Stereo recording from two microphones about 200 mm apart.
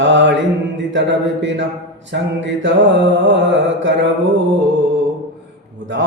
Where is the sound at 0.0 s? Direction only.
65° right (ahead or behind).